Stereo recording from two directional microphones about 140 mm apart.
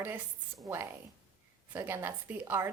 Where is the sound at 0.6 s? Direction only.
20° right (ahead or behind).